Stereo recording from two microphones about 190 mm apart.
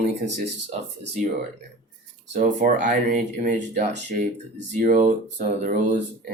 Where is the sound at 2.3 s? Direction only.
40° right (ahead or behind).